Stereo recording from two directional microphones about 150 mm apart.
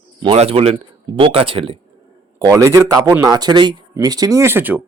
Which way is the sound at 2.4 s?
20° right (ahead or behind).